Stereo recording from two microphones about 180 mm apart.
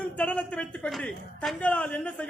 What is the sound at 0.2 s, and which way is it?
A woman's voice, 5° left (ahead or behind).